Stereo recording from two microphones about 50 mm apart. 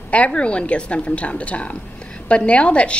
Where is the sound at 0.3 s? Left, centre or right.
Left.